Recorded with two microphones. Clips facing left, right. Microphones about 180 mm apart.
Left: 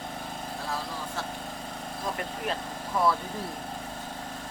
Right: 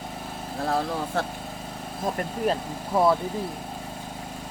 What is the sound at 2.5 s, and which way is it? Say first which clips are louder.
Speech: right 8 dB; 40° right (ahead or behind).